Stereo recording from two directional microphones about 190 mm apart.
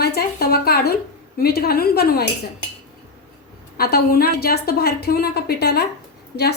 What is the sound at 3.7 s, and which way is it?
A woman's voice, 55° left (ahead or behind).